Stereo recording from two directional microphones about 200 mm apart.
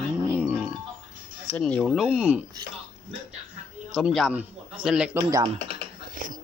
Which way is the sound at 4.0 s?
Centre (ahead or behind).